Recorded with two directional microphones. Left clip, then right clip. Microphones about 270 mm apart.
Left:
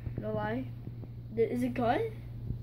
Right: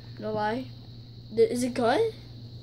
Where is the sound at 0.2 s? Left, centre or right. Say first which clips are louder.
Right 6 dB; right.